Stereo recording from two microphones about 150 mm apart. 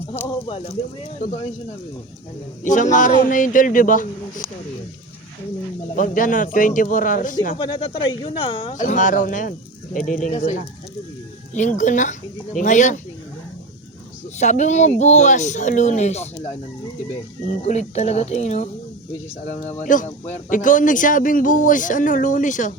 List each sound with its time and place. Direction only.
0.4 s speech: 40° left (ahead or behind)
2.6 s speech: 55° left (ahead or behind)
6.0 s speech: 60° left (ahead or behind)
7.5 s speech: 35° left (ahead or behind)
8.7 s speech: 55° left (ahead or behind)
11.8 s speech: 55° left (ahead or behind)
14.3 s speech: 50° left (ahead or behind)
19.8 s speech: 60° left (ahead or behind)